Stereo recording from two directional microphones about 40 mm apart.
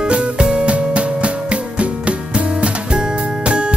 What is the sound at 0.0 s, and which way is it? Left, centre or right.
Music, right.